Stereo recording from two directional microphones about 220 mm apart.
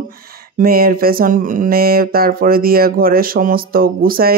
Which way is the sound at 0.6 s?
40° right (ahead or behind).